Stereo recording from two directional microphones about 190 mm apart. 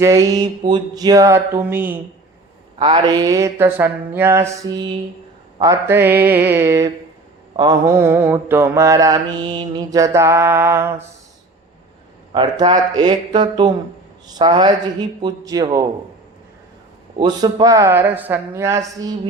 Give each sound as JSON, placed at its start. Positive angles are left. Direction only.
{"t": 0.0, "sound": "mantra", "side_deg": -15}
{"t": 2.7, "sound": "mantra", "side_deg": -25}
{"t": 12.3, "sound": "a man's voice", "side_deg": -25}
{"t": 17.2, "sound": "mantra", "side_deg": -20}